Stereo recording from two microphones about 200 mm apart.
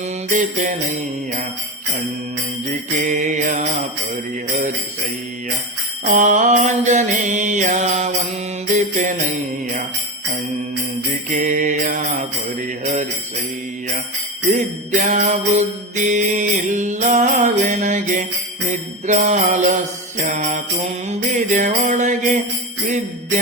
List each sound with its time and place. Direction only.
0.3 s mantra: 40° right (ahead or behind)
3.0 s mantra: 40° right (ahead or behind)
6.1 s mantra: 40° right (ahead or behind)
11.3 s mantra: 40° right (ahead or behind)
14.5 s mantra: 35° right (ahead or behind)